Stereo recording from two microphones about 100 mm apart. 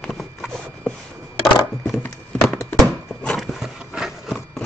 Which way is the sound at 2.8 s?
Centre (ahead or behind).